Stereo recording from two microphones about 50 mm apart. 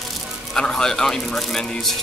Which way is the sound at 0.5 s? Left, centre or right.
Centre.